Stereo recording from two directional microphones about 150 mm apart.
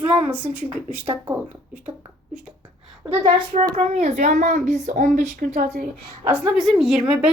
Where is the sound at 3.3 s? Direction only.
45° right (ahead or behind); by 5.6 s 65° right (ahead or behind).